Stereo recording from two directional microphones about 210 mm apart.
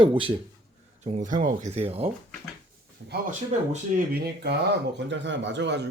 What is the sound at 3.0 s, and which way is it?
A man's voice, 50° right (ahead or behind).